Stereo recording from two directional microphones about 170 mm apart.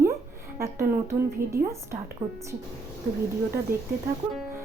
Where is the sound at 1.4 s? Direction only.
55° right (ahead or behind).